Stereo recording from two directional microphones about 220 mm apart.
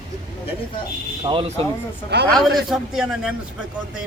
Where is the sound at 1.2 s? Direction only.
25° right (ahead or behind).